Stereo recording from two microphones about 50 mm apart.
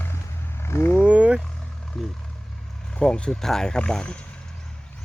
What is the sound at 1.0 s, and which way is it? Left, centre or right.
Vehicle, right.